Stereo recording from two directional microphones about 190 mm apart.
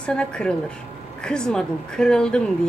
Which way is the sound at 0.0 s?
5° left (ahead or behind).